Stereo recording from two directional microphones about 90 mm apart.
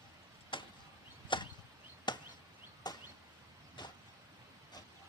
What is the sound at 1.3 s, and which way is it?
Chop, 65° left (ahead or behind).